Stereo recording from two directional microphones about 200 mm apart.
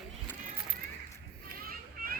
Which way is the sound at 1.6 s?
45° right (ahead or behind).